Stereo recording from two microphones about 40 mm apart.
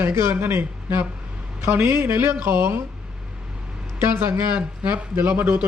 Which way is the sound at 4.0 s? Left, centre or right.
Right.